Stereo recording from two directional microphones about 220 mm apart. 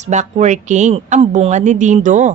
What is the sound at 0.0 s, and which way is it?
A woman's voice, 30° right (ahead or behind).